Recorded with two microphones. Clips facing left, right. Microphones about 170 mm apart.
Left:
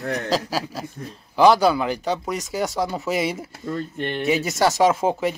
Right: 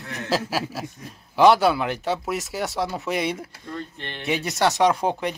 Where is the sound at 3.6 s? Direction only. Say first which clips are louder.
Left 7 dB; 50° left (ahead or behind).